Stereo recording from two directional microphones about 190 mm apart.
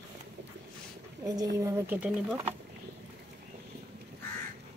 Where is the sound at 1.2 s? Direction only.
20° right (ahead or behind).